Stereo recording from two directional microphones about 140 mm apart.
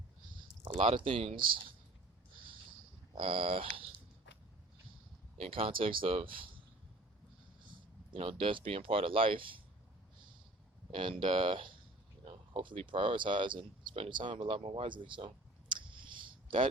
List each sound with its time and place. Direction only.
0.8 s speech: 40° right (ahead or behind)
3.2 s speech: 40° right (ahead or behind)
5.4 s speech: 40° right (ahead or behind)
7.7 s speech: 40° right (ahead or behind)
10.9 s speech: 40° right (ahead or behind)
15.7 s clicking: 35° right (ahead or behind)